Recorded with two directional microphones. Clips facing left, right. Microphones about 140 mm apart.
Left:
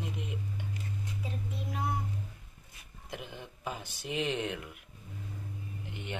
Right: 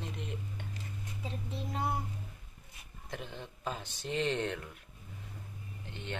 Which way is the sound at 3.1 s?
10° left (ahead or behind).